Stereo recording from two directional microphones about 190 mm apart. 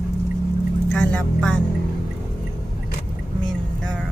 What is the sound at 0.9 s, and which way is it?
Speech, 5° left (ahead or behind).